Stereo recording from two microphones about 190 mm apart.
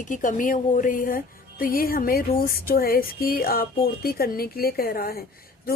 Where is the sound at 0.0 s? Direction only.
45° left (ahead or behind).